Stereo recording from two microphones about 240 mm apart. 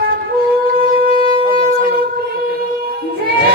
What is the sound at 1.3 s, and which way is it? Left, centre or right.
Shofar, left.